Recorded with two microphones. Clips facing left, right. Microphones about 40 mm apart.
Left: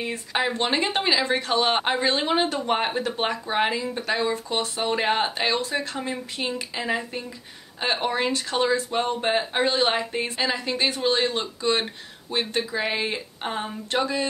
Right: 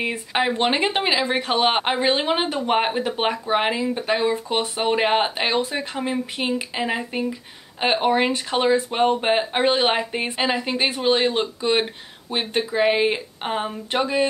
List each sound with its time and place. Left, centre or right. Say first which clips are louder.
0.0 s speech: right 3 dB; right